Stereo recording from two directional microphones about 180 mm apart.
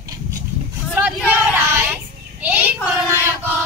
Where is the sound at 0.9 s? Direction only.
10° right (ahead or behind).